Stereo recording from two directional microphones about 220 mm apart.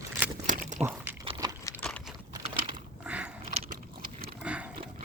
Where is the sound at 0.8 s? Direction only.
10° right (ahead or behind).